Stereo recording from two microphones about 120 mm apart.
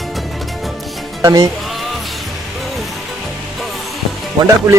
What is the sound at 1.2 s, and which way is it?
Music, 35° right (ahead or behind).